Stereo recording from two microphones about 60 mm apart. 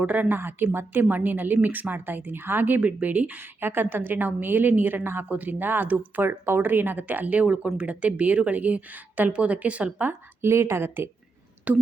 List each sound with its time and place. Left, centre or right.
0.0 s a woman's voice: right
0.7 s a woman's voice: right
10.1 s a woman's voice: right
11.7 s a woman's voice: right